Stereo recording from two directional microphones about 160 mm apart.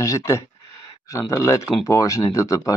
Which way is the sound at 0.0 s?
20° left (ahead or behind).